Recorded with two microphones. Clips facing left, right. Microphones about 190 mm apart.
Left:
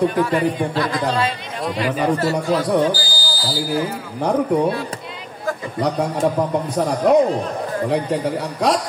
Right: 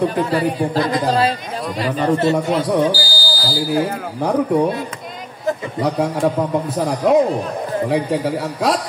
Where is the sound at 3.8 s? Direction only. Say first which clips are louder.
Right 3 dB; 60° right (ahead or behind).